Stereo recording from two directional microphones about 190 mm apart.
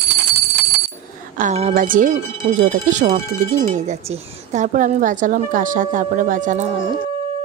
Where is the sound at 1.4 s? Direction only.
35° right (ahead or behind).